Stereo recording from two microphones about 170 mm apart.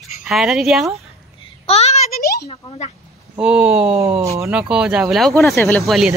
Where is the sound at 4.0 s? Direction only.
15° right (ahead or behind).